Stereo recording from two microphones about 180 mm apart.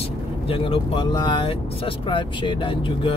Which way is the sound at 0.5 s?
30° left (ahead or behind).